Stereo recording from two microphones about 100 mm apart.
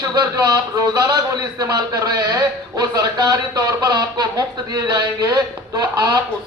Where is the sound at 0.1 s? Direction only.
40° right (ahead or behind).